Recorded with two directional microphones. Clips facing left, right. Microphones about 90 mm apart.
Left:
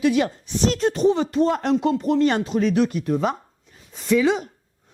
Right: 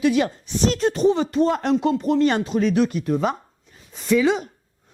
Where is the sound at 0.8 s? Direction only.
25° right (ahead or behind).